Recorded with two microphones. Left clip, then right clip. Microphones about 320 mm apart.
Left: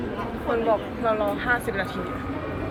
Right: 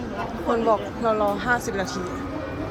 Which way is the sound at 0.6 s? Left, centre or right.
Centre.